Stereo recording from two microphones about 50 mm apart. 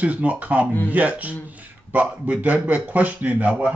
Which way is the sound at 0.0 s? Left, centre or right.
Right.